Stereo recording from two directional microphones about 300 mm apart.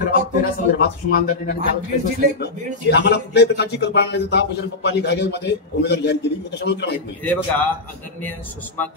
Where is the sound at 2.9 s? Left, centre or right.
Left.